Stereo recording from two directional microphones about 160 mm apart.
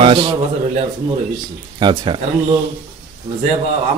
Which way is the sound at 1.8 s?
30° right (ahead or behind).